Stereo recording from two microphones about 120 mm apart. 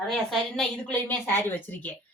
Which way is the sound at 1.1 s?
15° left (ahead or behind).